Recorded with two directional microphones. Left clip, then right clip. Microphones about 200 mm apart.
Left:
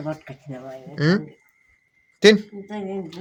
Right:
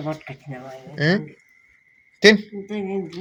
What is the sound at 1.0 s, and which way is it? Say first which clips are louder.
A man's voice: right 1 dB; 40° left (ahead or behind).